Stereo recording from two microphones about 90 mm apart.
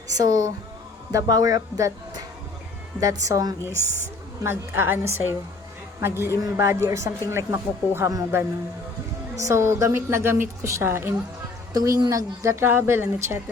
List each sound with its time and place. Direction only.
0.2 s a woman's voice: 40° right (ahead or behind)
3.8 s a woman's voice: 25° left (ahead or behind)
4.4 s a woman's voice: 25° right (ahead or behind)
11.7 s a woman's voice: 45° right (ahead or behind); by 13.4 s 30° right (ahead or behind)